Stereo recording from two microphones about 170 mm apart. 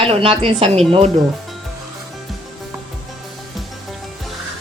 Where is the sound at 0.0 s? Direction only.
35° right (ahead or behind).